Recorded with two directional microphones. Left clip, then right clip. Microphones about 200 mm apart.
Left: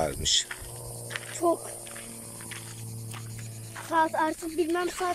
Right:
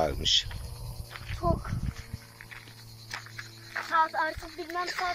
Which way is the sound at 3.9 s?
45° left (ahead or behind).